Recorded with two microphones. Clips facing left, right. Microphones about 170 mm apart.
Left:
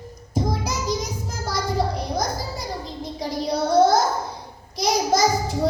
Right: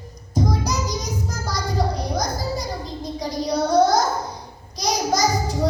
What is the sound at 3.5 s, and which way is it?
Child singing, 25° left (ahead or behind).